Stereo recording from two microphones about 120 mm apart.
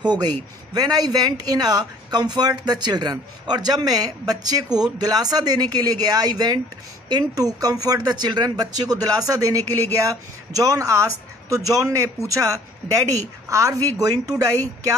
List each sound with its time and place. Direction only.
0.0 s speech: 35° right (ahead or behind)